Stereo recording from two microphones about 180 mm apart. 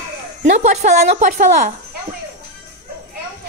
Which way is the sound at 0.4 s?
40° right (ahead or behind).